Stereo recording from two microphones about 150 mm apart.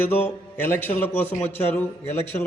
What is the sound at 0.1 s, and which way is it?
A man's voice, 10° left (ahead or behind).